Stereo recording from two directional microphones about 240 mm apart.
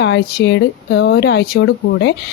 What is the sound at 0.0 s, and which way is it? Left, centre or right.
Speech, left.